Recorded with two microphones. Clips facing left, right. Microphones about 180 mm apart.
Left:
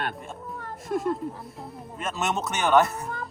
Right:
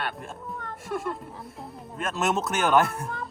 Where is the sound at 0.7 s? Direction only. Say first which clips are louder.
Left 5 dB; 40° left (ahead or behind).